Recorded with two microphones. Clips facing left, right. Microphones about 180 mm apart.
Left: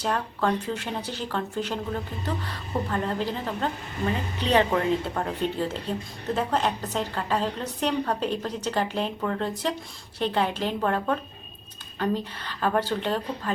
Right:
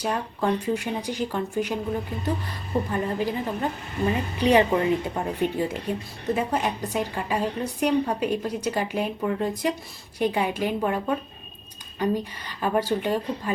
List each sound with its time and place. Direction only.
0.0 s speech: 15° right (ahead or behind)